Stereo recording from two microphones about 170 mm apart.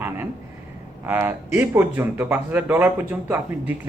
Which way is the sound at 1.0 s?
10° right (ahead or behind).